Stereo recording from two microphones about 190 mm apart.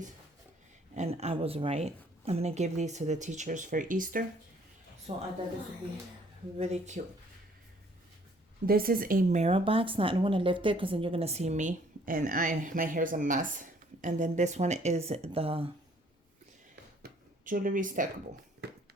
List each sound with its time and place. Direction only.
0.9 s speech: 35° right (ahead or behind)
5.1 s speech: 30° right (ahead or behind)
6.6 s speech: 40° right (ahead or behind)
8.6 s speech: 50° right (ahead or behind); by 15.7 s 30° right (ahead or behind)
17.0 s a sound: 45° right (ahead or behind)
18.6 s a sound: 60° right (ahead or behind)